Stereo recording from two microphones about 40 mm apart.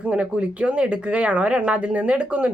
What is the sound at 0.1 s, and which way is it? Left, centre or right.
A woman's voice, right.